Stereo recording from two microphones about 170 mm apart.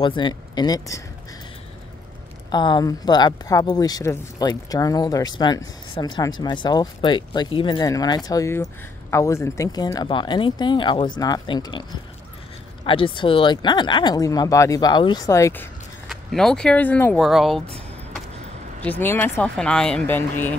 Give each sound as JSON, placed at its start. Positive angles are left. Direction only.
{"t": 0.0, "sound": "speech", "side_deg": 30}
{"t": 2.5, "sound": "speech", "side_deg": 25}
{"t": 12.8, "sound": "speech", "side_deg": 30}
{"t": 16.1, "sound": "speech", "side_deg": 0}
{"t": 18.9, "sound": "speech", "side_deg": 10}